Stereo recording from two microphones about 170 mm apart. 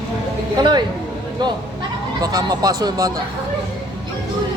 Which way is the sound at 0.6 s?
25° right (ahead or behind).